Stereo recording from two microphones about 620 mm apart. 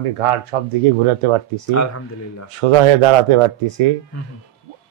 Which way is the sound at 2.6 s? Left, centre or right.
Right.